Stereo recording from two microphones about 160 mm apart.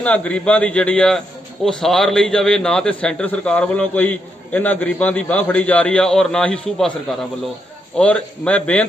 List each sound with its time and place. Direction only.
0.0 s a man's voice: 5° left (ahead or behind)